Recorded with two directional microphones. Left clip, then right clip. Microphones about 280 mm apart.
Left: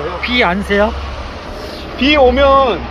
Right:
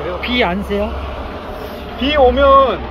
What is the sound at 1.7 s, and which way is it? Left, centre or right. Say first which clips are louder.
Speech: left 3 dB; left.